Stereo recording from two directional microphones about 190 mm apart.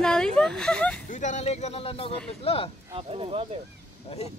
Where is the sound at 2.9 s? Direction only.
30° right (ahead or behind).